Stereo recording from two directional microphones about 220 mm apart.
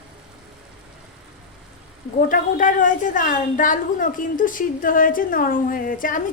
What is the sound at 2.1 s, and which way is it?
A woman's voice, 35° left (ahead or behind).